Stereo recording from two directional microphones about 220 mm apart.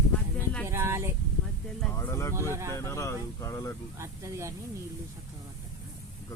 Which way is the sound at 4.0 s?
10° right (ahead or behind).